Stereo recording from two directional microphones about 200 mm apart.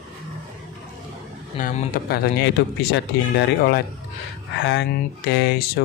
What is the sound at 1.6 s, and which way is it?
Speech, 50° left (ahead or behind).